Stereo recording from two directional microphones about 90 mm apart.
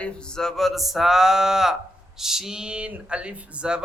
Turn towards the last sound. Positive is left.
turn(degrees=-10)  # may be behind; listen again after turning